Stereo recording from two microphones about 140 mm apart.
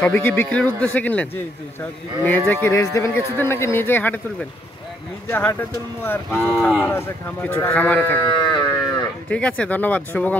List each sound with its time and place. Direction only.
0.0 s speech: 15° left (ahead or behind)
6.3 s speech: centre (ahead or behind)
6.9 s speech: 15° left (ahead or behind)
8.5 s livestock: 30° left (ahead or behind)
9.3 s speech: 10° left (ahead or behind)